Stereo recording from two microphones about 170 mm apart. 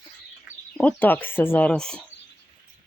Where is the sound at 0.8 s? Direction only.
10° left (ahead or behind).